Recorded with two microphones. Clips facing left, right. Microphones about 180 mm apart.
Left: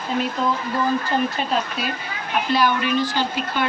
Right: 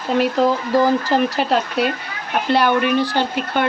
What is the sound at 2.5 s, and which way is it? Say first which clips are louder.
Speech: right 4 dB; 60° right (ahead or behind).